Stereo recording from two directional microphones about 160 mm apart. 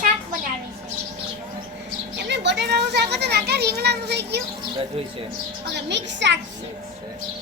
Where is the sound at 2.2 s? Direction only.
90° right.